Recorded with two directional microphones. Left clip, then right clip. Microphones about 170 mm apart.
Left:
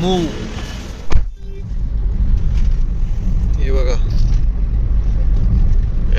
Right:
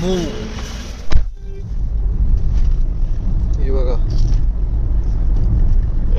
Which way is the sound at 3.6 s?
15° right (ahead or behind).